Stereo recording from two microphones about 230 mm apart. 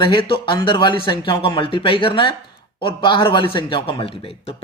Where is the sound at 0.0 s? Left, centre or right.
Left.